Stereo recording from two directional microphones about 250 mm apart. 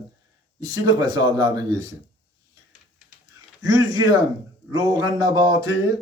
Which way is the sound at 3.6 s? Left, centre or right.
Centre.